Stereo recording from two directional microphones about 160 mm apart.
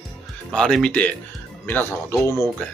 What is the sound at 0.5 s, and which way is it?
Speech, 5° left (ahead or behind).